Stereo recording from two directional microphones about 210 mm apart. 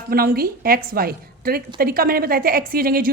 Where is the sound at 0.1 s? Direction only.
45° right (ahead or behind).